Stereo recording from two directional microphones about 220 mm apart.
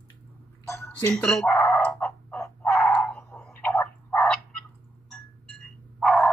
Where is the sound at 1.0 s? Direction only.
5° left (ahead or behind).